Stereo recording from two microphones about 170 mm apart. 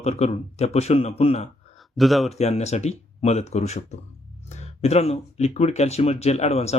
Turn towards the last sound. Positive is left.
turn(degrees=40)  # may be behind; listen again after turning